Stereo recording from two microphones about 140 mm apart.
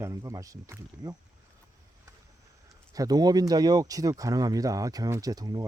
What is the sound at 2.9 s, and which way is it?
Speech, 25° right (ahead or behind).